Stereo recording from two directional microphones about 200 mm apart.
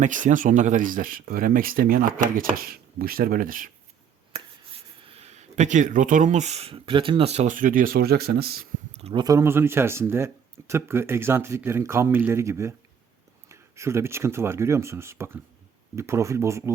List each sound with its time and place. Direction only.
0.0 s speech: 40° right (ahead or behind)
5.0 s speech: 30° right (ahead or behind); by 8.6 s 50° right (ahead or behind)
8.9 s a sound: 30° right (ahead or behind)
9.2 s speech: 15° right (ahead or behind)